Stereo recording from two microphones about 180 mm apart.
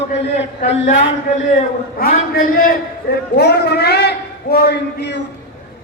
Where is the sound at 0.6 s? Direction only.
50° left (ahead or behind).